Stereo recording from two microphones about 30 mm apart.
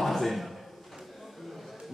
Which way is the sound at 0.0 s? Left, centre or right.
Centre.